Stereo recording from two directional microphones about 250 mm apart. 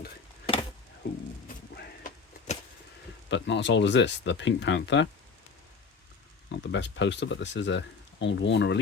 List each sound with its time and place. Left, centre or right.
1.7 s a sound: left
3.2 s speech: left
6.5 s speech: left